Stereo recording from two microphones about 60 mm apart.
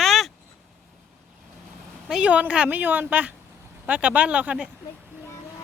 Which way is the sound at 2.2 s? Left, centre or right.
Right.